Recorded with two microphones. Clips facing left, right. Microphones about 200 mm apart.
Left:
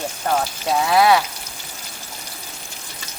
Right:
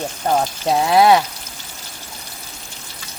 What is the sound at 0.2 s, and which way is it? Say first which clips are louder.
Speech: right 3 dB; 25° right (ahead or behind).